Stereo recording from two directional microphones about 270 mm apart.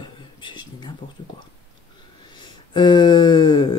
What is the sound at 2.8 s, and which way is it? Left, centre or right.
Speech, centre.